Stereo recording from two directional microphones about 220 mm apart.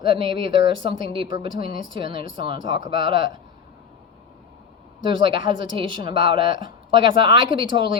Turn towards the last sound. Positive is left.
turn(degrees=-20)  # may be behind; listen again after turning